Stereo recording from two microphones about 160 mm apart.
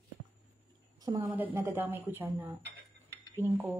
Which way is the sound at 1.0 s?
25° right (ahead or behind).